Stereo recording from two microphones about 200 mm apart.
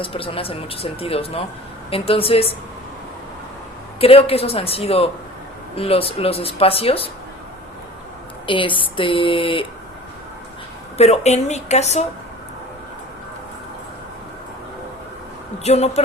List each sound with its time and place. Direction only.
0.0 s speech: 25° left (ahead or behind)
4.0 s speech: 30° left (ahead or behind)
8.4 s speech: 25° left (ahead or behind)
10.9 s speech: 30° left (ahead or behind)
15.6 s speech: 30° left (ahead or behind)